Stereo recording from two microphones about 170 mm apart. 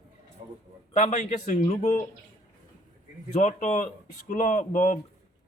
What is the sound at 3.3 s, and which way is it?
A man's voice, 50° left (ahead or behind).